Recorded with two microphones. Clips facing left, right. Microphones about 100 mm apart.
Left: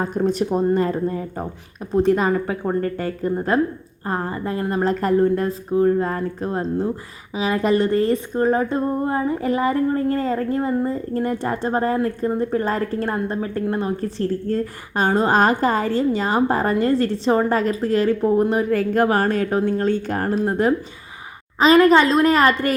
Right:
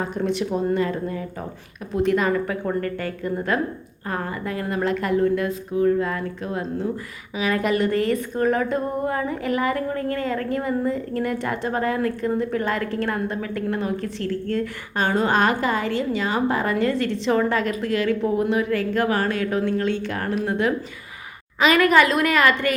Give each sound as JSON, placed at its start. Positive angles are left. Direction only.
{"t": 0.0, "sound": "a woman's voice", "side_deg": 40}